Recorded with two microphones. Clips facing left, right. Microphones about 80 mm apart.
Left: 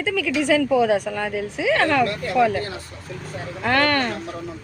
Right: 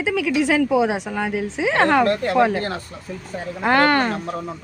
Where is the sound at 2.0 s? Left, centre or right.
Right.